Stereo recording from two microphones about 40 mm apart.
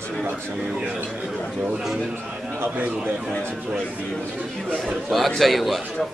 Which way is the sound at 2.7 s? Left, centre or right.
Right.